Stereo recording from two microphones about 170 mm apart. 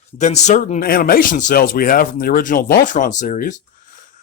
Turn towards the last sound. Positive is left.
turn(degrees=50)  # may be behind; listen again after turning